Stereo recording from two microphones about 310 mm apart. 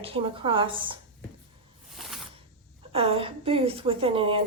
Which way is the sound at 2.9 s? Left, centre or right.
Centre.